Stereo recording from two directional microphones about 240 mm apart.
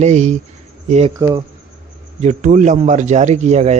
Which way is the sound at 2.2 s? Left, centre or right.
Right.